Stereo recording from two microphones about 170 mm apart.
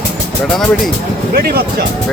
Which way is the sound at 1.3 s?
65° right (ahead or behind).